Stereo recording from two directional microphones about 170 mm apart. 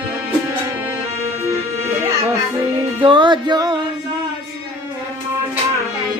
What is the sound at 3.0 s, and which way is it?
Music, 30° right (ahead or behind).